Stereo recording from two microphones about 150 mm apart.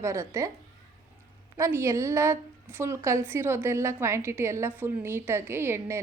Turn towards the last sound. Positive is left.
turn(degrees=-15)  # may be behind; listen again after turning